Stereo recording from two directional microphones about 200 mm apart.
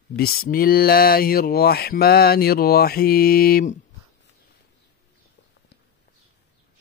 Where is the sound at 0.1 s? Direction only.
50° left (ahead or behind).